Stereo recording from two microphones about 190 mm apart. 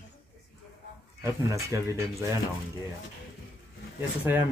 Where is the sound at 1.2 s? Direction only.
15° right (ahead or behind).